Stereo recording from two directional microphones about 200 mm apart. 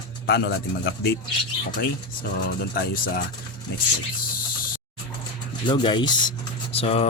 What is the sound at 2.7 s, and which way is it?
Speech, 50° left (ahead or behind).